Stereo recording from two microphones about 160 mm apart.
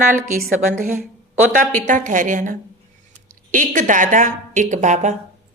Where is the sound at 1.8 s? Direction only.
50° right (ahead or behind).